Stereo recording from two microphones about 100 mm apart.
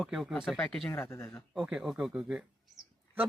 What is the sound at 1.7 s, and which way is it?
Speech, 5° right (ahead or behind).